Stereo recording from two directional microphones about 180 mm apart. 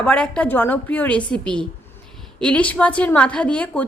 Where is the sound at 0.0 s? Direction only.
5° left (ahead or behind).